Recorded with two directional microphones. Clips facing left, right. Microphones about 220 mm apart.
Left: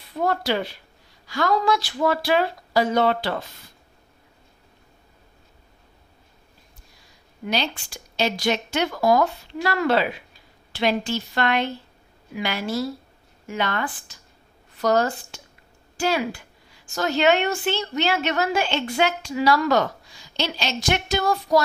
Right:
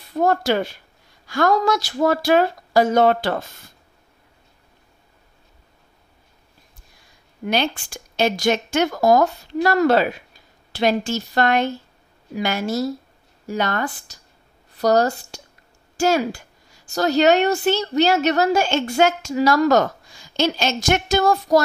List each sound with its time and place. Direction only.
0.1 s a woman's voice: 45° right (ahead or behind)
7.4 s a woman's voice: 55° right (ahead or behind)